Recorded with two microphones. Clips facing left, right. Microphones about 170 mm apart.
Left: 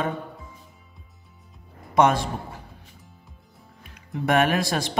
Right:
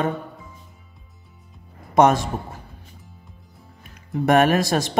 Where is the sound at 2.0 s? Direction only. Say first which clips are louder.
Right 3 dB; 45° right (ahead or behind).